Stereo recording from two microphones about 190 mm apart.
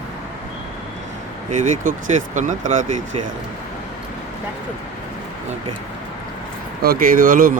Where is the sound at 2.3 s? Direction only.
40° right (ahead or behind).